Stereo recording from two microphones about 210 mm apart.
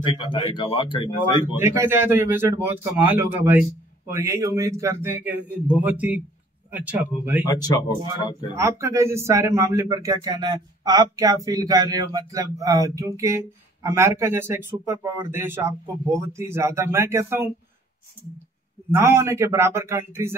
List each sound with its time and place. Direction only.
0.0 s speech: 25° left (ahead or behind)
1.6 s a man's voice: 10° right (ahead or behind)
7.4 s speech: 20° left (ahead or behind)
8.5 s a man's voice: 15° right (ahead or behind)
18.9 s a man's voice: 10° right (ahead or behind)